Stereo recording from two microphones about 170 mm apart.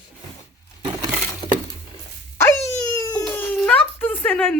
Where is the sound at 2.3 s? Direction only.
15° left (ahead or behind).